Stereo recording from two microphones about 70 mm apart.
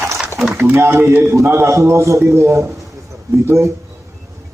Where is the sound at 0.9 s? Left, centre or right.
Right.